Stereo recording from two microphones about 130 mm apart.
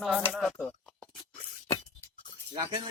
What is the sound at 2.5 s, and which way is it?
Speech, 35° right (ahead or behind).